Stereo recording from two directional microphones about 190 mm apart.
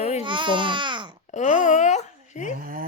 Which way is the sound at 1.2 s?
40° left (ahead or behind).